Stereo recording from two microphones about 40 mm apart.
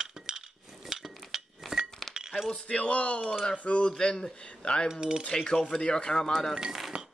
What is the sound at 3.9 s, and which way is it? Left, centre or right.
Speech, centre.